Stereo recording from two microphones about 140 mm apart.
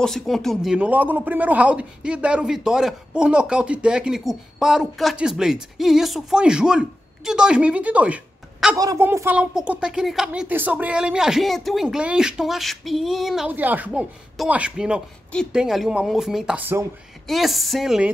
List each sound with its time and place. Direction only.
0.0 s speech: 5° left (ahead or behind)
8.7 s a woman's voice: 25° right (ahead or behind)
9.0 s speech: 15° right (ahead or behind)
13.5 s speech: 10° right (ahead or behind)
17.3 s speech: centre (ahead or behind)